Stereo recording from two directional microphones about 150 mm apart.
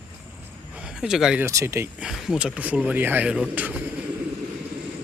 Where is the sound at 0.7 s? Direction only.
5° right (ahead or behind).